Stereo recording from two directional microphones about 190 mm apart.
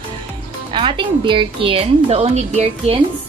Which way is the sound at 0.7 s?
25° right (ahead or behind).